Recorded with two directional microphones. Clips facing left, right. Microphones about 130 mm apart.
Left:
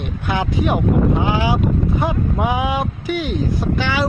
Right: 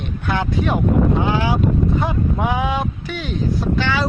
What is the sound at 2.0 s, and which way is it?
Speech, 10° left (ahead or behind).